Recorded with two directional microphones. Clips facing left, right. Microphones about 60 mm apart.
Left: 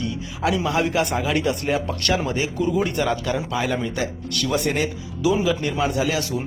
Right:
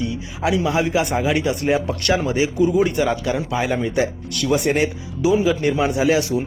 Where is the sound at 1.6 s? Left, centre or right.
Right.